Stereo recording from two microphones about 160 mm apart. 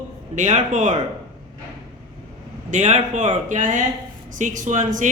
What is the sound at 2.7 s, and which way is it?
Speech, 45° right (ahead or behind).